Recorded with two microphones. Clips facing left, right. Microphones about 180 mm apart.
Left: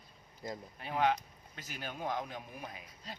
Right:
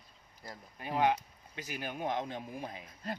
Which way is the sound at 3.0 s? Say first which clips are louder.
Right 9 dB; 55° right (ahead or behind).